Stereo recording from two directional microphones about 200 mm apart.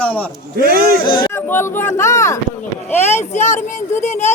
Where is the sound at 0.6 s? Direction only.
50° right (ahead or behind).